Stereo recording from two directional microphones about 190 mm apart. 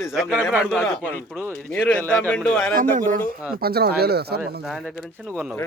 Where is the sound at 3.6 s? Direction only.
55° right (ahead or behind).